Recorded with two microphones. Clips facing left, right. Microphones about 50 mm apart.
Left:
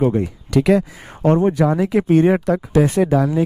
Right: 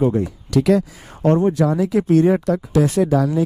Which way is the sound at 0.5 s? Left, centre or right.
Left.